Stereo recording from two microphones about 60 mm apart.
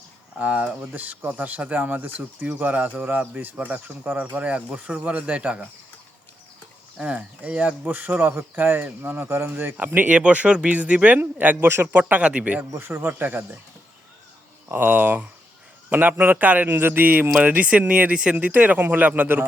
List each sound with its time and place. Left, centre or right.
0.3 s speech: right
7.0 s speech: centre
7.9 s speech: right
12.7 s speech: right
13.0 s speech: right
14.7 s speech: right